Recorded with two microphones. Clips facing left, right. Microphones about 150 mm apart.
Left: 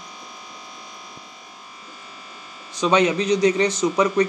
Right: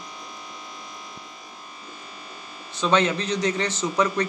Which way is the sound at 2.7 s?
15° left (ahead or behind).